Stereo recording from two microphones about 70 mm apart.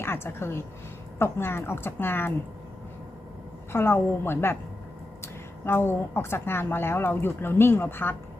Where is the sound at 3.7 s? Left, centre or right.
Left.